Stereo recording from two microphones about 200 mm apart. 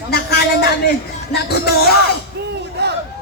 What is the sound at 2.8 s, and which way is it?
Chatter, 55° right (ahead or behind).